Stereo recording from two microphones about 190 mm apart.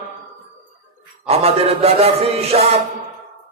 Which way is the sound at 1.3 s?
30° right (ahead or behind).